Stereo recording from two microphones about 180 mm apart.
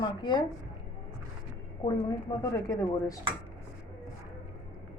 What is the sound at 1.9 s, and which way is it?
Speech, 20° left (ahead or behind).